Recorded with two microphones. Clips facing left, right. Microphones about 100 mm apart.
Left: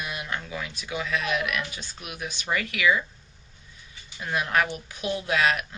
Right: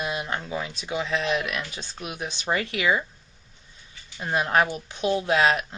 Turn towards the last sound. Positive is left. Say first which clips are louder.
# right 3 dB
turn(degrees=-30)  # may be behind; listen again after turning